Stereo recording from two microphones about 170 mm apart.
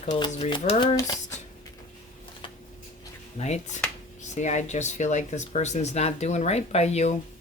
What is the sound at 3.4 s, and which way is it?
Speech, 40° left (ahead or behind).